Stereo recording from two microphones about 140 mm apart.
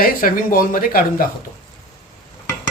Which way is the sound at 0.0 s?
85° left.